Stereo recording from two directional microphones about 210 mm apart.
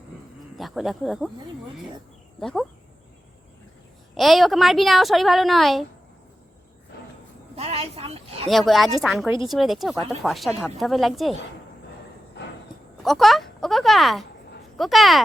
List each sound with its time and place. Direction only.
0.5 s a woman's voice: centre (ahead or behind)
2.4 s a woman's voice: centre (ahead or behind)
4.1 s a woman's voice: centre (ahead or behind)
7.5 s a woman's voice: 30° right (ahead or behind)
8.4 s a woman's voice: centre (ahead or behind)
13.0 s a woman's voice: centre (ahead or behind)